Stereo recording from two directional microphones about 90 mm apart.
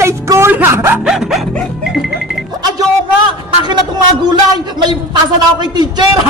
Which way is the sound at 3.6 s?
55° right (ahead or behind).